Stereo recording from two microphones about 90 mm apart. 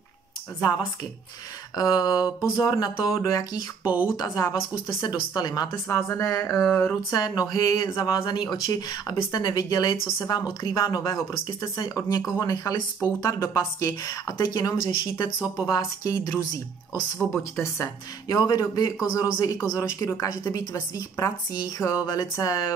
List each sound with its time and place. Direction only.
1.8 s a woman's voice: 45° left (ahead or behind)
4.8 s speech: 50° left (ahead or behind)
5.9 s speech: 30° left (ahead or behind)
6.8 s a woman's voice: 40° left (ahead or behind)
14.9 s speech: 60° left (ahead or behind)
15.4 s speech: 15° right (ahead or behind)
15.7 s a woman's voice: 40° left (ahead or behind)
18.3 s speech: 45° left (ahead or behind)
19.8 s a woman's voice: 35° left (ahead or behind)